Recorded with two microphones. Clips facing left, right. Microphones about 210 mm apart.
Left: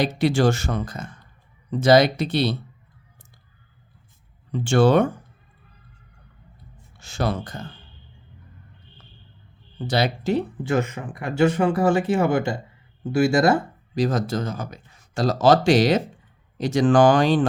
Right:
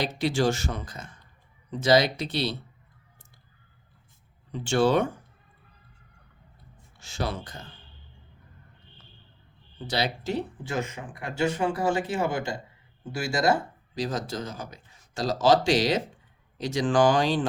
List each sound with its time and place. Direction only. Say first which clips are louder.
0.0 s speech: left 5 dB; 55° left (ahead or behind)
4.6 s speech: left 5 dB; 55° left (ahead or behind)
7.0 s speech: left 6 dB; 55° left (ahead or behind)
9.8 s speech: left 6 dB; 50° left (ahead or behind)